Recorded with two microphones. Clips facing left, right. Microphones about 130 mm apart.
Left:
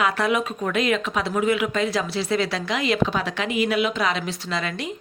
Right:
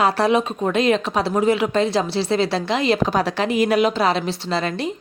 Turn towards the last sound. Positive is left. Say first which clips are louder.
# right 5 dB
turn(degrees=-35)  # may be behind; listen again after turning